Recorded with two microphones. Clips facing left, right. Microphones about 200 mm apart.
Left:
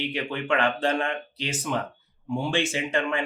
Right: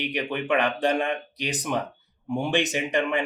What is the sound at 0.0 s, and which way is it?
Speech, 15° right (ahead or behind).